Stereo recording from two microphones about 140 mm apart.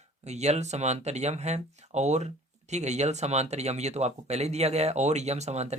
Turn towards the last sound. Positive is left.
turn(degrees=-50)  # may be behind; listen again after turning